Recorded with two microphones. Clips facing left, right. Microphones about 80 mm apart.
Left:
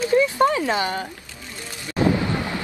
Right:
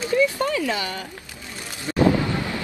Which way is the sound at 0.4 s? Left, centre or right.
Left.